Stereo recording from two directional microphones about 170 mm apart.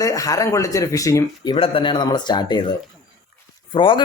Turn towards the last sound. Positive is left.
turn(degrees=30)  # may be behind; listen again after turning